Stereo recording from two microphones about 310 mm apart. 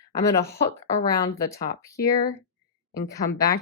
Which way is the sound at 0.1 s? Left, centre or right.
Centre.